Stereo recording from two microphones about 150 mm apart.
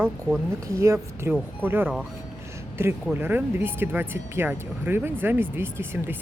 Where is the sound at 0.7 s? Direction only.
20° right (ahead or behind).